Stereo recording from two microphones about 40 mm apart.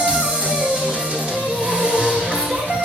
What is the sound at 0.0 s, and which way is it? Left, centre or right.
Music, right.